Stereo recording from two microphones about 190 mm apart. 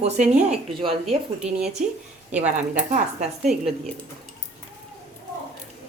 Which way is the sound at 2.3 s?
5° right (ahead or behind).